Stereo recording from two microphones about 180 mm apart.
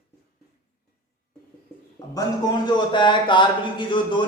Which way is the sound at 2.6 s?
25° left (ahead or behind).